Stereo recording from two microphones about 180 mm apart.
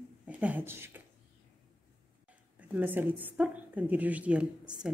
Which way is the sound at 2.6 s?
10° right (ahead or behind).